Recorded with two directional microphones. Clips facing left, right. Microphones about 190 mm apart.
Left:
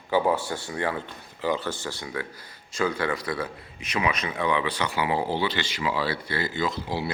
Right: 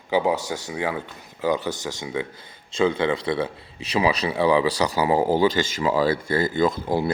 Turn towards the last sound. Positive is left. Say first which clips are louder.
# right 7 dB
turn(degrees=-50)  # may be behind; listen again after turning